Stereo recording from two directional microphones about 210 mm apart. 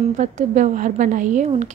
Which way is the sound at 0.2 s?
35° right (ahead or behind).